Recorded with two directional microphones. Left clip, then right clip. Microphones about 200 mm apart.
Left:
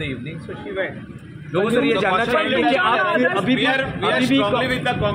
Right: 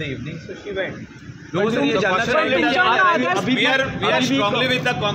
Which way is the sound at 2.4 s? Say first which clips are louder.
Right 1 dB; 15° right (ahead or behind).